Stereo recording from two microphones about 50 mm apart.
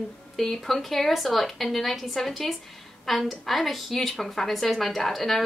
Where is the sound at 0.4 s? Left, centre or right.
Centre.